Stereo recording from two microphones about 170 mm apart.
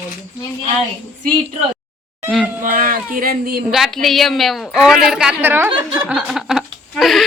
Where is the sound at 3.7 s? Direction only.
Centre (ahead or behind).